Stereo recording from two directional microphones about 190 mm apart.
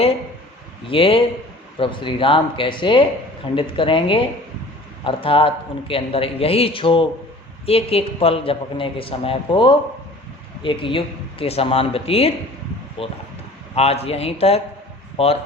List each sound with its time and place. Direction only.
0.9 s a man's voice: 30° left (ahead or behind)